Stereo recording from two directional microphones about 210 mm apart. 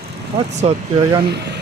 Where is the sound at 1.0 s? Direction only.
15° right (ahead or behind).